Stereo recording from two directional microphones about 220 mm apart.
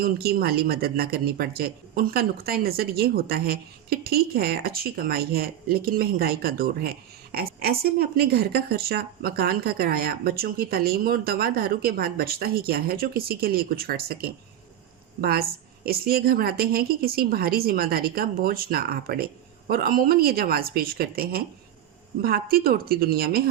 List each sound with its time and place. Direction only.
0.0 s a woman's voice: 45° right (ahead or behind)